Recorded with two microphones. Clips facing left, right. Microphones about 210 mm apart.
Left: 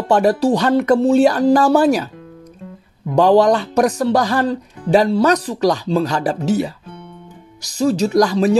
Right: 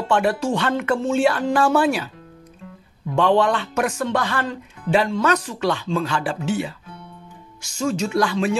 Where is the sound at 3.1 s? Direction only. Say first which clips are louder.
Left 6 dB; 40° left (ahead or behind).